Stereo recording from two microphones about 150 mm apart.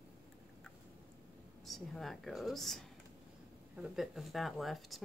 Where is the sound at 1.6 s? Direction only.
Centre (ahead or behind).